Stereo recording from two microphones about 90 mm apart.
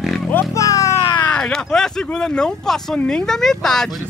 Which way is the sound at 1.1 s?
15° left (ahead or behind).